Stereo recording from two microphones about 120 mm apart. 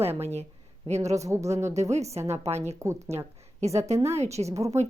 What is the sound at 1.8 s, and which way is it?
Speech, 65° right (ahead or behind).